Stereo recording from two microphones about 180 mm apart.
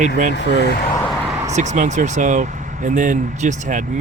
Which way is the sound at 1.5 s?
40° right (ahead or behind).